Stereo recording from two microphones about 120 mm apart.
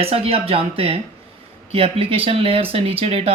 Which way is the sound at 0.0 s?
55° right (ahead or behind).